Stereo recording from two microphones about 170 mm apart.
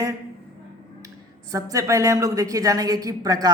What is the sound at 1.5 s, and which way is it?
A woman's voice, 20° right (ahead or behind).